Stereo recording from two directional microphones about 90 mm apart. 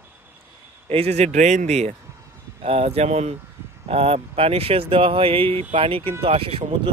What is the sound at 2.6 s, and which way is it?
Speech, 90° right.